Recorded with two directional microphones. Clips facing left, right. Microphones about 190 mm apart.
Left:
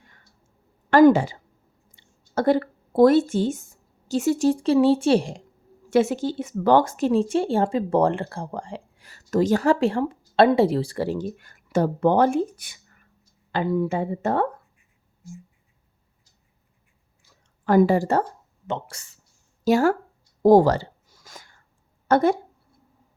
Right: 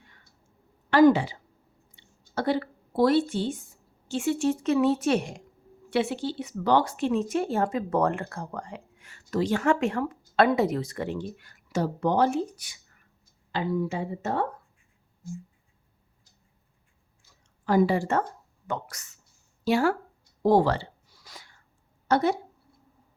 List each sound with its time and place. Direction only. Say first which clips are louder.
0.9 s a woman's voice: left 4 dB; 50° left (ahead or behind); by 5.4 s 30° left (ahead or behind)
5.9 s speech: left 6 dB; 45° left (ahead or behind)
17.7 s a woman's voice: left 5 dB; 50° left (ahead or behind); by 19.2 s 30° left (ahead or behind)
19.6 s a woman's voice: left 5 dB; 45° left (ahead or behind)
20.4 s a sound: left 6 dB; 45° left (ahead or behind)
22.0 s speech: left 5 dB; 50° left (ahead or behind)